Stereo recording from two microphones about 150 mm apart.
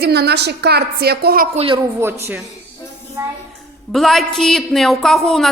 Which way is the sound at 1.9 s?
15° right (ahead or behind).